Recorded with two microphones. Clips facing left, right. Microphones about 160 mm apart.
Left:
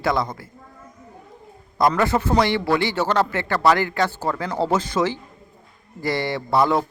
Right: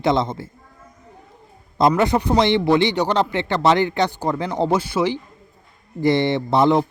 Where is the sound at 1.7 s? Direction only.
25° right (ahead or behind).